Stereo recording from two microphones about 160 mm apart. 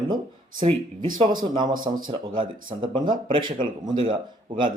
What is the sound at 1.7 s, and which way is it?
Speech, 60° right (ahead or behind).